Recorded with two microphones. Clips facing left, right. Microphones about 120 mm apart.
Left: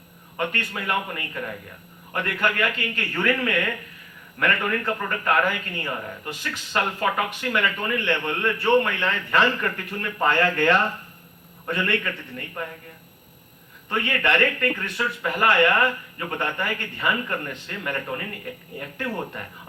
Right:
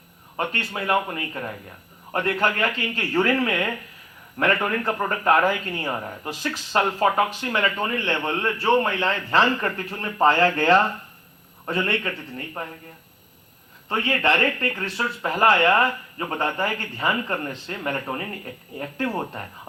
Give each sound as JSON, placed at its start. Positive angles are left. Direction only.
{"t": 0.3, "sound": "a man's voice", "side_deg": -30}
{"t": 13.9, "sound": "speech", "side_deg": -30}